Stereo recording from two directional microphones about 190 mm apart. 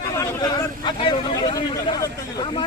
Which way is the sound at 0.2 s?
20° left (ahead or behind).